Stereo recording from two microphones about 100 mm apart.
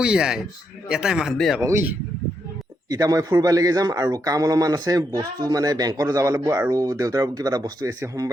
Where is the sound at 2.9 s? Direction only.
40° right (ahead or behind).